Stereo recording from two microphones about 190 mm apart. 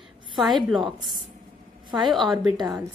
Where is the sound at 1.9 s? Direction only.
25° right (ahead or behind).